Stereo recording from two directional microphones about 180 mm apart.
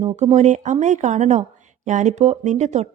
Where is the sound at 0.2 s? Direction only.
40° right (ahead or behind).